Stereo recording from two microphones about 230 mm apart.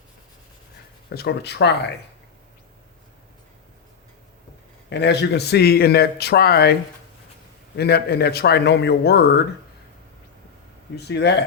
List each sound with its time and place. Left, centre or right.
1.1 s speech: left
4.9 s speech: left
7.8 s speech: left
10.9 s speech: left